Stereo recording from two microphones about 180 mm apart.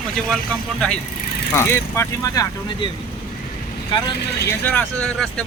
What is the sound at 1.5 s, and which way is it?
Speech, 15° left (ahead or behind).